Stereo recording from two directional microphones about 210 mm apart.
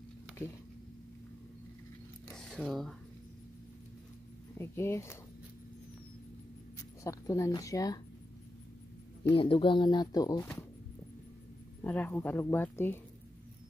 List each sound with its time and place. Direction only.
2.2 s zipper: 5° left (ahead or behind)
2.6 s speech: centre (ahead or behind)
4.6 s speech: 10° left (ahead or behind)
7.0 s speech: 15° left (ahead or behind)
9.3 s speech: 25° left (ahead or behind)
11.8 s speech: 10° left (ahead or behind)